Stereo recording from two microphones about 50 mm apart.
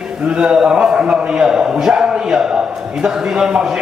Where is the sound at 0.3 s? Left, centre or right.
Centre.